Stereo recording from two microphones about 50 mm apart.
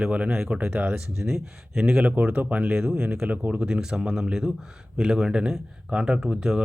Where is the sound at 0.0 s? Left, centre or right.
Right.